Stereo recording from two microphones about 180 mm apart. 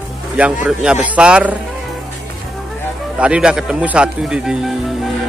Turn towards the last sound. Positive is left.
turn(degrees=0)  # may be behind; listen again after turning